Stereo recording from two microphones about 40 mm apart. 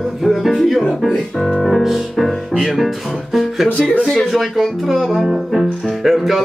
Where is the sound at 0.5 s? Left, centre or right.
Centre.